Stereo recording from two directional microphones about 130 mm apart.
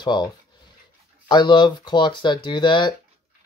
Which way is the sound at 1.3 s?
35° left (ahead or behind).